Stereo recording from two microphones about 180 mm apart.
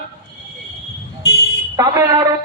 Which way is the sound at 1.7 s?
20° right (ahead or behind).